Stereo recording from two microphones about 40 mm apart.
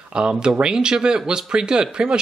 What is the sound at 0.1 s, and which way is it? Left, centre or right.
Speech, right.